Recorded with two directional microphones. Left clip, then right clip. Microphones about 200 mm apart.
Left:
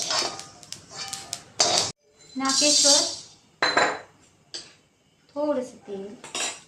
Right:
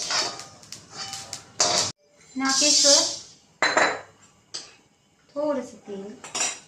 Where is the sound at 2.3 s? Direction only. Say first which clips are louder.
Even; 15° left (ahead or behind).